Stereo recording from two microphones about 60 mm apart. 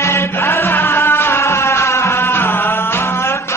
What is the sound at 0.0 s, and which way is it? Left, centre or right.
Music, left.